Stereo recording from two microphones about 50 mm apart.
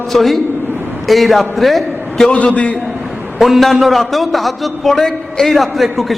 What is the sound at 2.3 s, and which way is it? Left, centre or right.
Speech, left.